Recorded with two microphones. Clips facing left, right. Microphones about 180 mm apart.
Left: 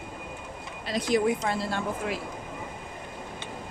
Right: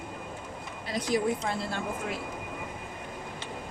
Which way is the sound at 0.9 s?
80° left.